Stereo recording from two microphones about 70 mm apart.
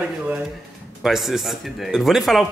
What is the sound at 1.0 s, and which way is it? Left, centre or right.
Speech, centre.